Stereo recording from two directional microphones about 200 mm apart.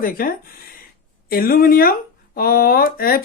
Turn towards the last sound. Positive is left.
turn(degrees=50)  # may be behind; listen again after turning